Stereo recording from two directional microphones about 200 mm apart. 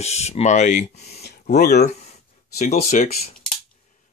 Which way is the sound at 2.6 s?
40° left (ahead or behind).